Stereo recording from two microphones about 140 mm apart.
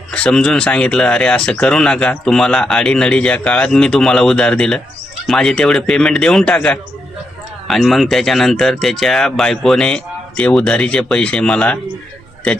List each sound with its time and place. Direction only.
0.1 s speech: 5° left (ahead or behind)